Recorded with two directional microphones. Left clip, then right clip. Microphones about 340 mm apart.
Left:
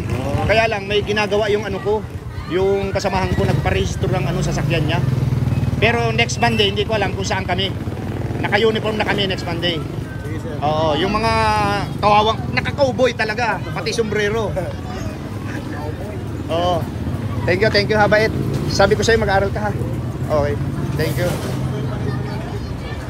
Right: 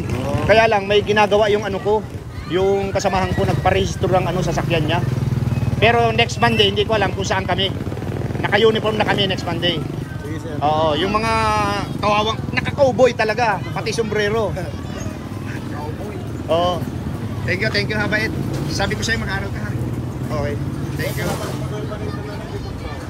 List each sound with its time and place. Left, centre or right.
0.5 s speech: centre
16.4 s speech: centre